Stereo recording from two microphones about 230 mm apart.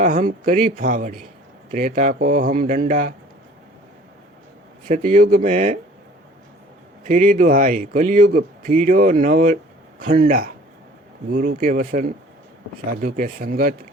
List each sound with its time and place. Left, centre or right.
0.0 s speech: right
4.9 s speech: right
7.0 s speech: right